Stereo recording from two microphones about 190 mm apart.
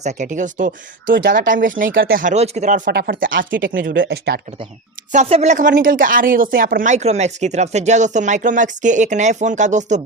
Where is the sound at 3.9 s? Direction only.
70° right (ahead or behind).